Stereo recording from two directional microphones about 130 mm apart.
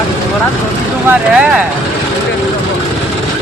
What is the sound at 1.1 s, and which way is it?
Speech, 5° right (ahead or behind).